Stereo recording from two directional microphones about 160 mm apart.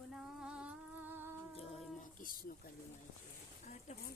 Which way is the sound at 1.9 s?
60° left (ahead or behind).